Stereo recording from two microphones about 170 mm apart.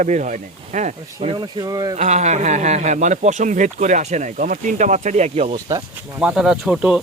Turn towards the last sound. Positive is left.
turn(degrees=-5)  # may be behind; listen again after turning